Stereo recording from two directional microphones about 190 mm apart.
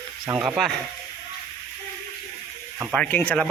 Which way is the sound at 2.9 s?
5° left (ahead or behind).